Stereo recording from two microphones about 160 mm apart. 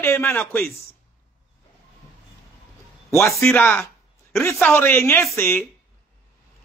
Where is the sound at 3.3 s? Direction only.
5° left (ahead or behind).